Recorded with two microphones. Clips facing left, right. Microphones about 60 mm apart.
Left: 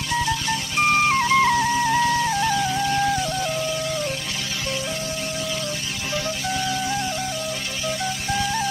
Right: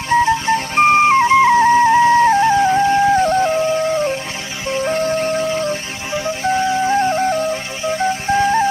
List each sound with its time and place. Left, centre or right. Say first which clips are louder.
0.1 s music: right 10 dB; right